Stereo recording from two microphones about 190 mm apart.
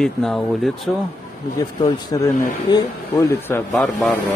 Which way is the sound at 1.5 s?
20° left (ahead or behind).